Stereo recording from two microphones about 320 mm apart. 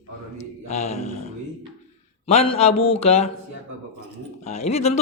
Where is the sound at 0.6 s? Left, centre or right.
Left.